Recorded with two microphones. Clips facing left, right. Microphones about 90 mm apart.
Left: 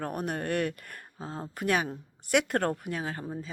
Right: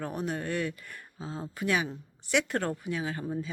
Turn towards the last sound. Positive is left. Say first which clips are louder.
# right 1 dB
turn(degrees=45)  # may be behind; listen again after turning